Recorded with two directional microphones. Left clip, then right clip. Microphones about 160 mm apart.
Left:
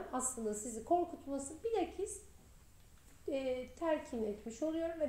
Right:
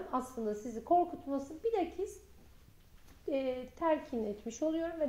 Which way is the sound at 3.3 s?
5° right (ahead or behind).